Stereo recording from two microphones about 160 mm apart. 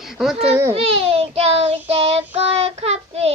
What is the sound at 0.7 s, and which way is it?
Child singing, 35° right (ahead or behind).